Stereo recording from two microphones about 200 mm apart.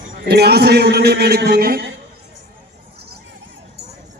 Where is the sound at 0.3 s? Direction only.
55° right (ahead or behind).